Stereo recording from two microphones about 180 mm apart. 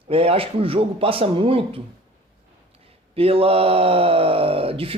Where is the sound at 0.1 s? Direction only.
30° right (ahead or behind).